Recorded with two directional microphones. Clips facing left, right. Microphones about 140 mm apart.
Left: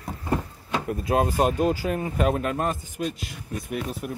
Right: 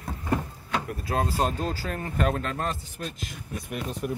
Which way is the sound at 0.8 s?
20° left (ahead or behind).